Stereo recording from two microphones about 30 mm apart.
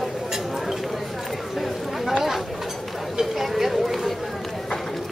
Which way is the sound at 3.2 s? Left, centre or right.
Centre.